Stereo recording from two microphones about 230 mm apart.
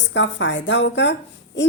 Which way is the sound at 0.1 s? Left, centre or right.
Left.